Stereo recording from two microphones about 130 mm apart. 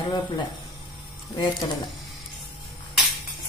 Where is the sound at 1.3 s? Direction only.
30° left (ahead or behind).